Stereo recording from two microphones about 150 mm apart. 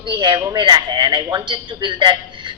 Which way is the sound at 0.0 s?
30° right (ahead or behind).